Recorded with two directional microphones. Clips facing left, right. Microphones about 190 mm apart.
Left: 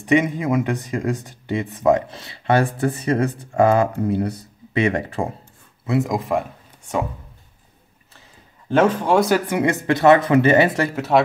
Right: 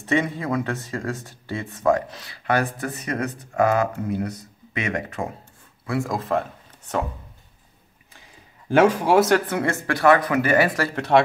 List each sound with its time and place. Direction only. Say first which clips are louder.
0.0 s speech: left 5 dB; 15° left (ahead or behind); by 5.3 s 30° left (ahead or behind)
5.9 s speech: left 4 dB; 20° left (ahead or behind)
8.6 s speech: even; 10° right (ahead or behind)
9.3 s speech: left 2 dB; 15° left (ahead or behind)